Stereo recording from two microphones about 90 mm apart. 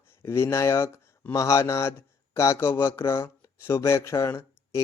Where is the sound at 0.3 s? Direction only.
30° left (ahead or behind).